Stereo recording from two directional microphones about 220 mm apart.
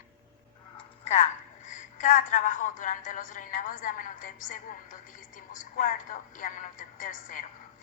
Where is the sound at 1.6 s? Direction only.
35° left (ahead or behind).